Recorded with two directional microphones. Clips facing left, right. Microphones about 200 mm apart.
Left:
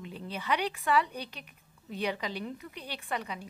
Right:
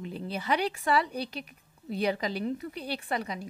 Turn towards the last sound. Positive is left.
turn(degrees=-40)  # may be behind; listen again after turning